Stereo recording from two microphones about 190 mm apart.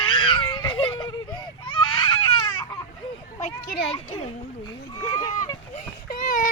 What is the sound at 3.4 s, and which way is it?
Children playing, 40° left (ahead or behind).